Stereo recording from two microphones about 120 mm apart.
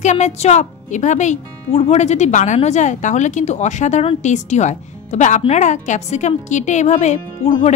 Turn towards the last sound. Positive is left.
turn(degrees=85)